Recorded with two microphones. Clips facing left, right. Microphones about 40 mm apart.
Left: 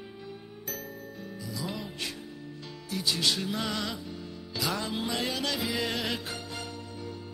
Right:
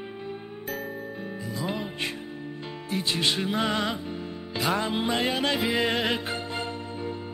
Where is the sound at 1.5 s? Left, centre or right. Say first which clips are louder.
Right 5 dB; right.